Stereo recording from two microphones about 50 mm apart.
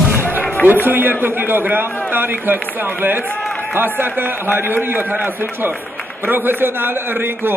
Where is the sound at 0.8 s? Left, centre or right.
Right.